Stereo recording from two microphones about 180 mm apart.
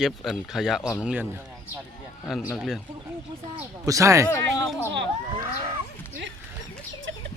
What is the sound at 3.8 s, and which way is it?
Speech, 20° right (ahead or behind).